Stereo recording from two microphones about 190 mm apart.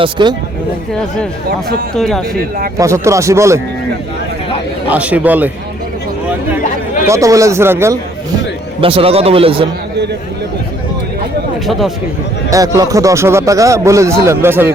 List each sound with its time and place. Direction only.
0.0 s a man's voice: 25° right (ahead or behind)
2.0 s speech: centre (ahead or behind)
2.7 s speech: 15° right (ahead or behind)
4.9 s speech: 5° right (ahead or behind)
7.1 s speech: 15° right (ahead or behind)
8.8 s a man's voice: 30° right (ahead or behind)
11.6 s speech: centre (ahead or behind)
12.5 s speech: 15° right (ahead or behind)